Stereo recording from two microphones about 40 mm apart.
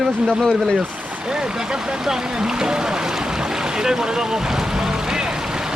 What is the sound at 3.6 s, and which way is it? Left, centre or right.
Boat, centre.